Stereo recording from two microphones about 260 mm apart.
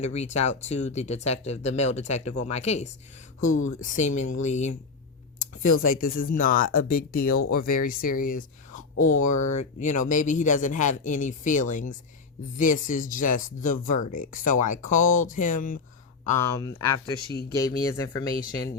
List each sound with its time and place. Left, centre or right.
0.0 s speech: left
9.2 s speech: left
9.5 s speech: left
16.6 s speech: centre